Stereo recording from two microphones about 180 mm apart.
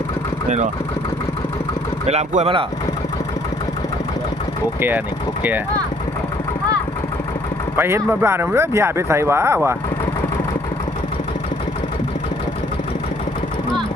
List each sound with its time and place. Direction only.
0.4 s speech: 40° right (ahead or behind)
2.0 s speech: 35° right (ahead or behind)
4.8 s speech: 10° right (ahead or behind)
7.8 s speech: 15° right (ahead or behind)